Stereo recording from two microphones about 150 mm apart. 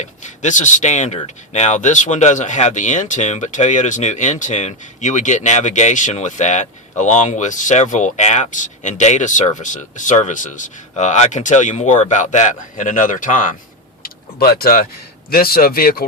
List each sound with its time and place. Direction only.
0.0 s speech: 55° left (ahead or behind)
14.0 s vehicle: 80° left
15.3 s speech: 90° left